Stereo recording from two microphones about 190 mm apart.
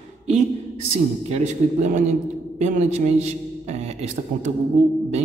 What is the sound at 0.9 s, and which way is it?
A man's voice, 35° right (ahead or behind).